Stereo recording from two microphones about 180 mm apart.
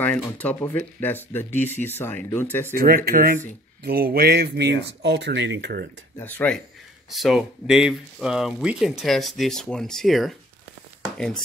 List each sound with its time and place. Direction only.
0.0 s speech: 10° left (ahead or behind)
2.7 s speech: 55° right (ahead or behind)
5.0 s speech: 75° right (ahead or behind)
6.1 s speech: 10° left (ahead or behind)